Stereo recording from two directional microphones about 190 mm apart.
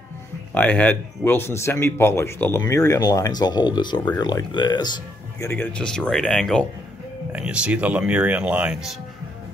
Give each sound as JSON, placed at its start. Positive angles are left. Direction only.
{"t": 0.6, "sound": "speech", "side_deg": 10}
{"t": 5.4, "sound": "speech", "side_deg": 10}